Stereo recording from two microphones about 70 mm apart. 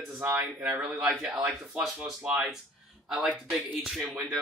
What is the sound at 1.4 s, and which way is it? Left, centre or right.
Speech, centre.